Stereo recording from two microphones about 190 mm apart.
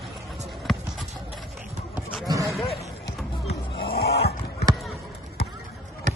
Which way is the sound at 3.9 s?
55° left (ahead or behind).